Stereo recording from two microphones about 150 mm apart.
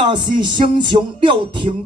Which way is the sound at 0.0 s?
30° right (ahead or behind).